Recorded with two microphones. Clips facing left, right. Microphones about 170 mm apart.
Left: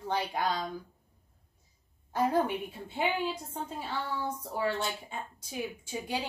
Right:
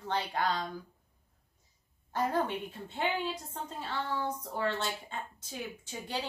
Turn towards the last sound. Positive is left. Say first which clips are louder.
# left 3 dB
turn(degrees=10)  # may be behind; listen again after turning